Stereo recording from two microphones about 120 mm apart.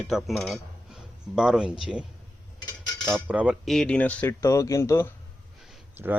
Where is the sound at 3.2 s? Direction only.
10° right (ahead or behind).